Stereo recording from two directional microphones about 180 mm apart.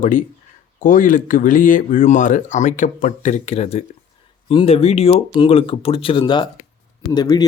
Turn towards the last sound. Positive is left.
turn(degrees=20)  # may be behind; listen again after turning